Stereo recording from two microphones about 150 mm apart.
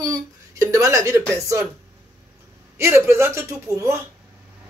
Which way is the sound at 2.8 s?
20° right (ahead or behind).